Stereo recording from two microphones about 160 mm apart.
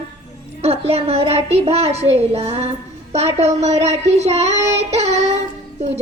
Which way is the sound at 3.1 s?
40° right (ahead or behind).